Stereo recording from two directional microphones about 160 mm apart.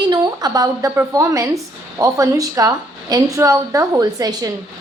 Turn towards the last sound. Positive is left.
turn(degrees=-25)  # may be behind; listen again after turning